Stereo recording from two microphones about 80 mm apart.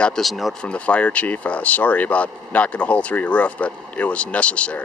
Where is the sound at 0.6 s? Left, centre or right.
Centre.